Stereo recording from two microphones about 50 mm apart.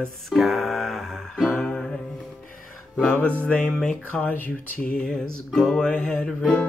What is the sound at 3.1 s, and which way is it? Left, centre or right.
Speech, left.